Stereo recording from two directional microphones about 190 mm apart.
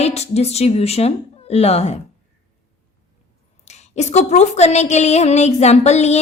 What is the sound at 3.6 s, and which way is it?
A woman's voice, 35° left (ahead or behind).